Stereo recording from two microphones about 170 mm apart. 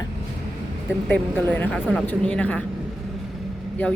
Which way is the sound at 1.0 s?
10° left (ahead or behind).